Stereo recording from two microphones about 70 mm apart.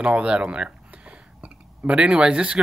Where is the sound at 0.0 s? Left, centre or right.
Centre.